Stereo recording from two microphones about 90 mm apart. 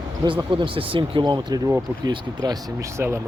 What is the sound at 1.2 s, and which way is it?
Speech, 50° right (ahead or behind).